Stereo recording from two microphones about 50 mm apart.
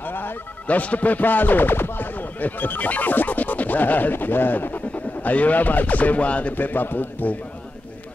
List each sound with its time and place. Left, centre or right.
0.0 s music: left
0.7 s speech: left
6.5 s a man's voice: left